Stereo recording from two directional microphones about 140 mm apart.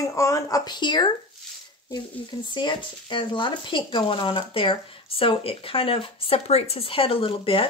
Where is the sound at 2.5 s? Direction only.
35° left (ahead or behind).